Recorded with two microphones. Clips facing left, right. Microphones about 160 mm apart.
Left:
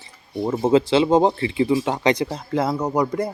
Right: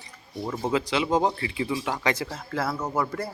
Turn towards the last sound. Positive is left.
turn(degrees=15)  # may be behind; listen again after turning